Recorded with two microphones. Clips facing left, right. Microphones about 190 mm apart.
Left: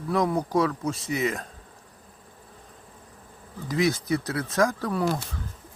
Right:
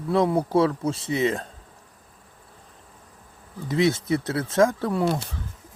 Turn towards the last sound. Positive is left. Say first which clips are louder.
# right 2 dB
turn(degrees=-25)  # may be behind; listen again after turning